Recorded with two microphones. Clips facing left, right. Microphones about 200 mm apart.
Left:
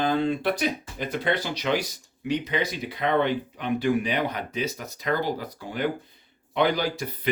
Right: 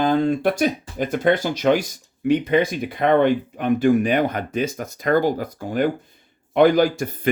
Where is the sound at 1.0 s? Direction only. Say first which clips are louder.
Right 8 dB; 45° right (ahead or behind).